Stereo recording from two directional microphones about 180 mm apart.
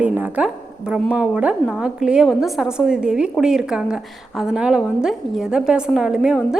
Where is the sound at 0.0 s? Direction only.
10° right (ahead or behind).